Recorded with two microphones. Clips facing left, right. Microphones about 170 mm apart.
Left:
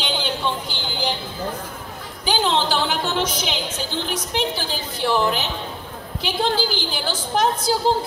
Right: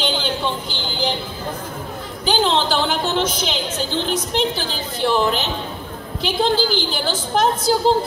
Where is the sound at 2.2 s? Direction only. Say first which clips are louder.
Right 2 dB; 15° left (ahead or behind).